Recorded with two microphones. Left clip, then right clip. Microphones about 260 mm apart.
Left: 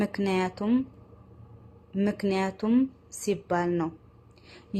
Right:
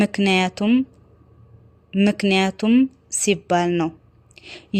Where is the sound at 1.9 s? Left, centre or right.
Right.